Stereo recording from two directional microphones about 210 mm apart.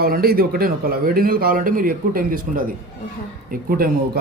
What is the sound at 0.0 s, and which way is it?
A man's voice, 45° right (ahead or behind).